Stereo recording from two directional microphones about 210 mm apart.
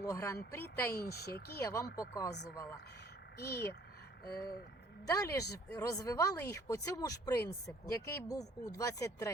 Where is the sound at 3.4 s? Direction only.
50° left (ahead or behind).